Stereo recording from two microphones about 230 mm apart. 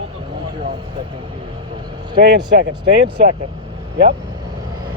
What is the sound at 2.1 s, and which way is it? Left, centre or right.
Speech, right.